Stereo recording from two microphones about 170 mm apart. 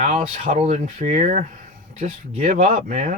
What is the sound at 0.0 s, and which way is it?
Speech, 40° right (ahead or behind).